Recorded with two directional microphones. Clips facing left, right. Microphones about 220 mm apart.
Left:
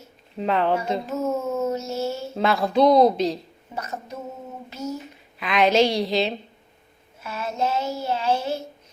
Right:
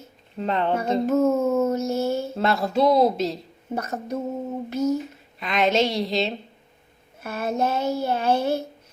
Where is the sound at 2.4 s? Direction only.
Centre (ahead or behind).